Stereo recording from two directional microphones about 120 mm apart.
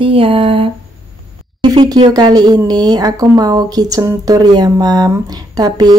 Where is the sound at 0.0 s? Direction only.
50° right (ahead or behind).